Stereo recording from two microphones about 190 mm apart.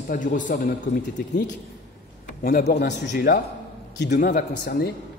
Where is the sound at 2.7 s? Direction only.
55° left (ahead or behind).